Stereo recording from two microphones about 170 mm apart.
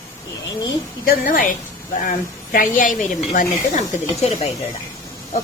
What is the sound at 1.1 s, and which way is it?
A woman's voice, 55° left (ahead or behind).